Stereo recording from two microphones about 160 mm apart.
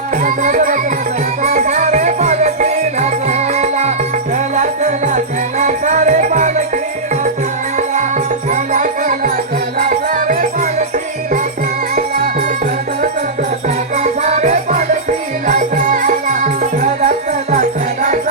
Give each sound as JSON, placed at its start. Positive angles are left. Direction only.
{"t": 0.2, "sound": "music", "side_deg": -55}
{"t": 8.4, "sound": "music", "side_deg": -50}
{"t": 11.9, "sound": "music", "side_deg": -65}
{"t": 13.9, "sound": "music", "side_deg": -45}